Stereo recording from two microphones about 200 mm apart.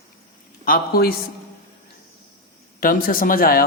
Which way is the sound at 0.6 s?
50° left (ahead or behind).